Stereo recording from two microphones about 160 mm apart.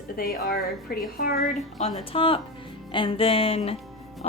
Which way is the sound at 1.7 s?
40° left (ahead or behind).